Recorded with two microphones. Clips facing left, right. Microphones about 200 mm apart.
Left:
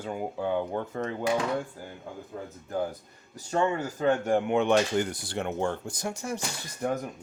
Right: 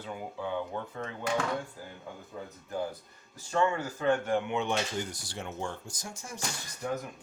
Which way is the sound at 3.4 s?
40° left (ahead or behind).